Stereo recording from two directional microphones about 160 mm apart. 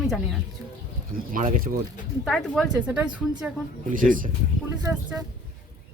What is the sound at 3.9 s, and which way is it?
Speech, 55° right (ahead or behind).